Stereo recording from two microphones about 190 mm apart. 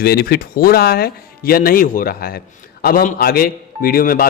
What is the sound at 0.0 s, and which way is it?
Speech, 55° left (ahead or behind).